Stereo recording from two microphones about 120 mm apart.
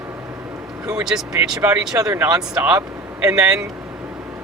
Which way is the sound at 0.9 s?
5° right (ahead or behind).